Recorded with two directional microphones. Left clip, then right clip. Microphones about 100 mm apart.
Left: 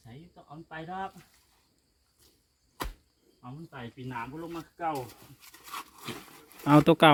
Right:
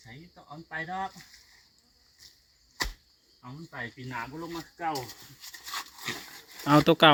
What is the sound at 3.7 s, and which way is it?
Speech, 15° left (ahead or behind).